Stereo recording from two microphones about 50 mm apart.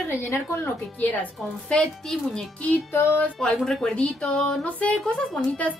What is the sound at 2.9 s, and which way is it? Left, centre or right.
Child singing, left.